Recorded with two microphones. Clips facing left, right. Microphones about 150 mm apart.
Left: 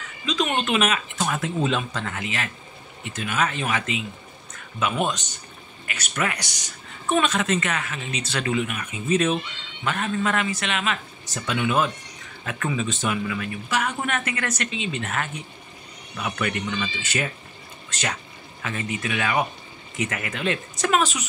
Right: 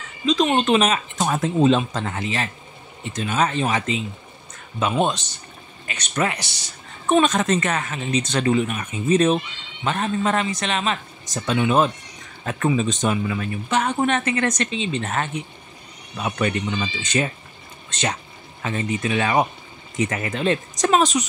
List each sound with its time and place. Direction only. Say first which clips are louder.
0.2 s a sound: right 6 dB; 35° right (ahead or behind)
0.6 s speech: right 5 dB; 35° right (ahead or behind)
7.1 s speech: right 4 dB; 40° right (ahead or behind)